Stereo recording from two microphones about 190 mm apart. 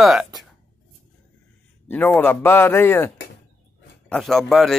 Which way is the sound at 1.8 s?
10° left (ahead or behind).